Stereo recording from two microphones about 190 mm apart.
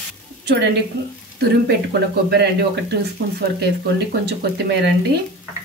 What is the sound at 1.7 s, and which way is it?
Speech, 60° right (ahead or behind).